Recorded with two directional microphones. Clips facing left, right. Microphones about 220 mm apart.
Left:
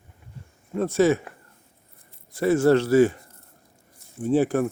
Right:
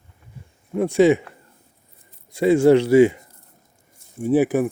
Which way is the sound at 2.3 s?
15° right (ahead or behind).